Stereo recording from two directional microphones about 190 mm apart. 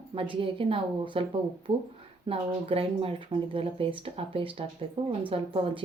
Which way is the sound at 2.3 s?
30° right (ahead or behind).